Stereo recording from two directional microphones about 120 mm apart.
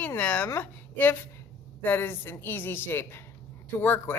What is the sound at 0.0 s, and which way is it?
A woman's voice, 15° left (ahead or behind).